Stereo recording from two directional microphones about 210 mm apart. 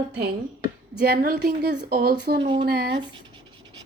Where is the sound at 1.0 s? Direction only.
45° right (ahead or behind).